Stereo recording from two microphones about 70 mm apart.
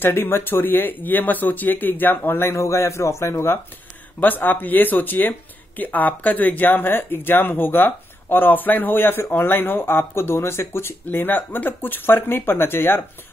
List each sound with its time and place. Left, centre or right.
0.0 s speech: left
4.2 s speech: left